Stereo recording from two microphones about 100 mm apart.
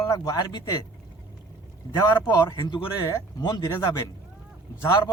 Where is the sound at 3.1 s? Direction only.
40° left (ahead or behind).